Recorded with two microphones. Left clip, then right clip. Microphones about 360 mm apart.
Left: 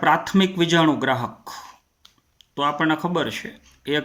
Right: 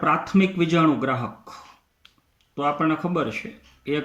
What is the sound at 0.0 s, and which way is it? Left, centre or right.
Speech, left.